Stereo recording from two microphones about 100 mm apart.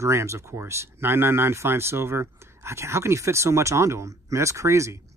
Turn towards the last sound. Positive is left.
turn(degrees=-30)  # may be behind; listen again after turning